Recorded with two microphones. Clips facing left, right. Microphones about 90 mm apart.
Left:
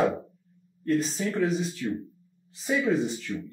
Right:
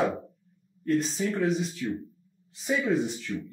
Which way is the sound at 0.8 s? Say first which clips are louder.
Even; centre (ahead or behind).